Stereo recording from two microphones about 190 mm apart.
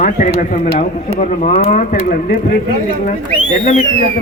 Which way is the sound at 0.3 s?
40° left (ahead or behind).